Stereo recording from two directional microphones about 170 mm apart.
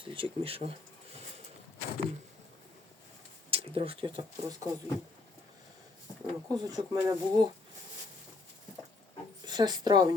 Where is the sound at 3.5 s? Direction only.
35° right (ahead or behind).